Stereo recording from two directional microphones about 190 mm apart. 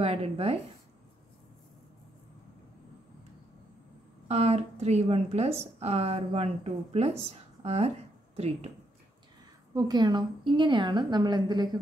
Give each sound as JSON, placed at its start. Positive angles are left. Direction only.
{"t": 0.0, "sound": "speech", "side_deg": -30}
{"t": 4.3, "sound": "speech", "side_deg": -35}
{"t": 9.8, "sound": "a woman's voice", "side_deg": -20}